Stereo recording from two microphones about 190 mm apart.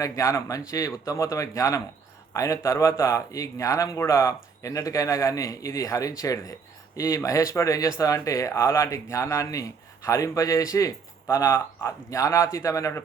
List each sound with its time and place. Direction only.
0.0 s speech: 15° left (ahead or behind)